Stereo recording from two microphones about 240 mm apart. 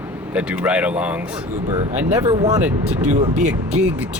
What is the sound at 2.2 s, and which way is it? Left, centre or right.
Speech, centre.